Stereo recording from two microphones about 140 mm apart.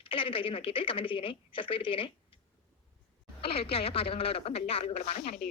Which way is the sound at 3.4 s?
45° left (ahead or behind).